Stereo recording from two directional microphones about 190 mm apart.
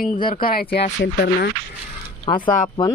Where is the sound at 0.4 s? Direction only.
50° left (ahead or behind).